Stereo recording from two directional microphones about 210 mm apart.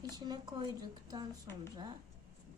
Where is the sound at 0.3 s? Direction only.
20° right (ahead or behind).